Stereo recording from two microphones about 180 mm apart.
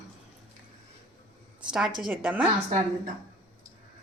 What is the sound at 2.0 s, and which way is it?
Speech, 5° right (ahead or behind).